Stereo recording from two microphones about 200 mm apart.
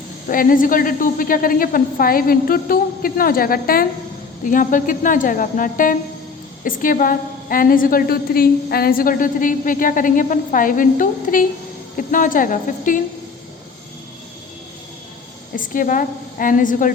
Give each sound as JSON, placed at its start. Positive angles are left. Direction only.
{"t": 0.3, "sound": "a woman's voice", "side_deg": 45}
{"t": 15.5, "sound": "a woman's voice", "side_deg": 45}